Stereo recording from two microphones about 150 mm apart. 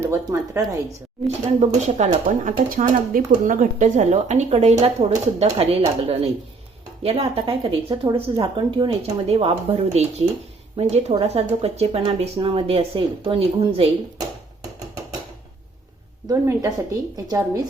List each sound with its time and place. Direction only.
0.0 s speech: 20° right (ahead or behind)
1.5 s speech: 50° right (ahead or behind)
7.0 s speech: 40° right (ahead or behind)
16.3 s speech: 20° right (ahead or behind)